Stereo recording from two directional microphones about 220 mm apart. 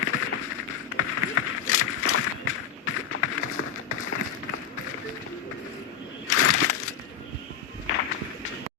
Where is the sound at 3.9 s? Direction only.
80° left.